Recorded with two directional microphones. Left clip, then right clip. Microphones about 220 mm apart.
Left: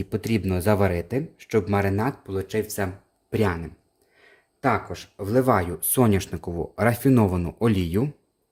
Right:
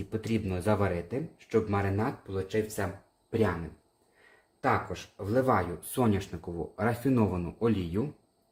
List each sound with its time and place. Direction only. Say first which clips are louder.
0.1 s speech: left 6 dB; 50° left (ahead or behind)
4.6 s speech: left 5 dB; 55° left (ahead or behind)